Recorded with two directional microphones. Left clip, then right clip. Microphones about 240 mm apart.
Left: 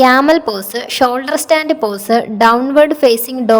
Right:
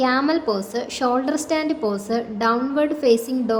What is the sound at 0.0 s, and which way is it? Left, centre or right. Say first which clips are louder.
A woman's voice: left 11 dB; left.